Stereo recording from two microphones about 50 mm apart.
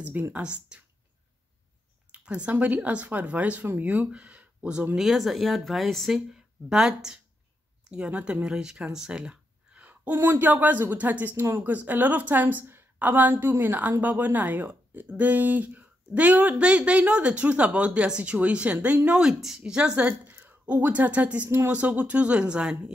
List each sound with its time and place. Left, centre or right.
0.0 s speech: right
0.3 s speech: right
2.1 s a sound: right
2.5 s a woman's voice: right
4.9 s speech: centre
6.7 s speech: centre
7.9 s a woman's voice: right
19.0 s speech: centre
20.0 s a sound: right
20.6 s speech: right